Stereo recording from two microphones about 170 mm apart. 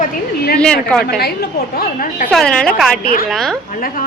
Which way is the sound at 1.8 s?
60° left (ahead or behind).